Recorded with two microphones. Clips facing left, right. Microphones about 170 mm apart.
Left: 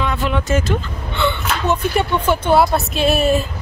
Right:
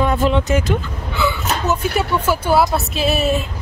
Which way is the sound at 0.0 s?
45° right (ahead or behind).